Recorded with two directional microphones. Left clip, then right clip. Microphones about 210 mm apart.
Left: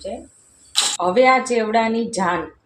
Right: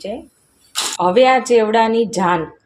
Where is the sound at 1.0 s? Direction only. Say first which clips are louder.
Right 3 dB; 45° right (ahead or behind).